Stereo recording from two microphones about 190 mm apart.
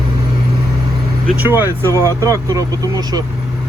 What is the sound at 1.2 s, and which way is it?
Speech, 10° right (ahead or behind).